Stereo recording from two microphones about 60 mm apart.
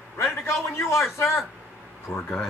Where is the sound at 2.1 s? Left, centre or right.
Centre.